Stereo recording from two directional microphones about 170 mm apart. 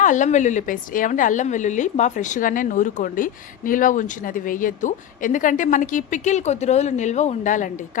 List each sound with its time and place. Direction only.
0.0 s a woman's voice: 45° left (ahead or behind)